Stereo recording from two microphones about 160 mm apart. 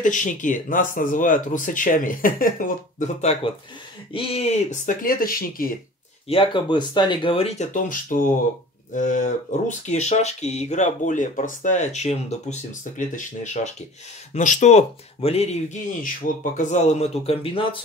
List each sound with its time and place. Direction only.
0.0 s speech: 50° left (ahead or behind)
3.0 s speech: 40° left (ahead or behind); by 5.8 s 65° left (ahead or behind)
6.2 s speech: 35° left (ahead or behind)